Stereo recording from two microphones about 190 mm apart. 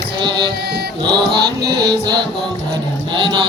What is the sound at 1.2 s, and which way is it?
Mantra, 60° right (ahead or behind).